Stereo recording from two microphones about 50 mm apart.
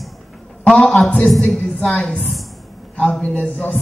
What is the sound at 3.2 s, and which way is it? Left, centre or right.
Speech, left.